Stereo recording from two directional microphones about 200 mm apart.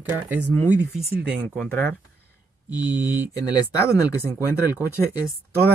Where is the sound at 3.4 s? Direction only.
15° left (ahead or behind).